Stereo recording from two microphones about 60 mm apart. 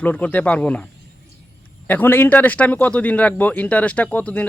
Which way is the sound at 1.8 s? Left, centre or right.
Left.